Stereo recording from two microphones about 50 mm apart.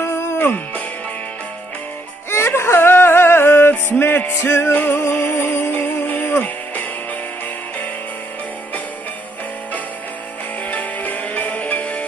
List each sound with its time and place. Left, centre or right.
0.0 s music: left
2.3 s a sound: left
4.7 s music: left
10.7 s music: left